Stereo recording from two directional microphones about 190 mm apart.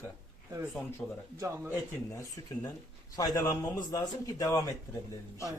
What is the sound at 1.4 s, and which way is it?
Speech, 15° right (ahead or behind).